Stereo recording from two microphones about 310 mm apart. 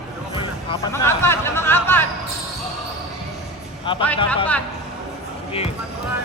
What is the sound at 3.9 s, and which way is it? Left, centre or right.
Speech, centre.